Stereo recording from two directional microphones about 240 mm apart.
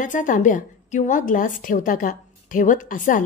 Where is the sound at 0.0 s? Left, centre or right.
Left.